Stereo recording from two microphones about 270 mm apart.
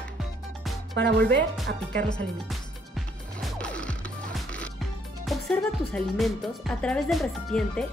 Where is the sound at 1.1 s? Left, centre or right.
Centre.